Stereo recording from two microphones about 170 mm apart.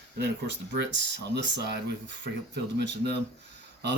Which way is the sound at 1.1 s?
85° right.